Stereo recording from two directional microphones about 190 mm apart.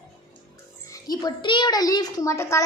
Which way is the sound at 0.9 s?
20° left (ahead or behind).